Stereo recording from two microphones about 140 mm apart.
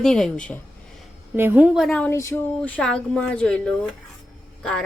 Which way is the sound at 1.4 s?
15° right (ahead or behind).